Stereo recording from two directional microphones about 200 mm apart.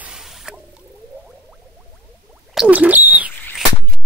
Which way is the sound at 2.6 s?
5° right (ahead or behind).